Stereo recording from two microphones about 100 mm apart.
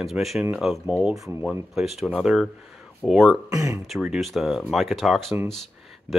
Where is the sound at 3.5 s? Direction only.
30° right (ahead or behind).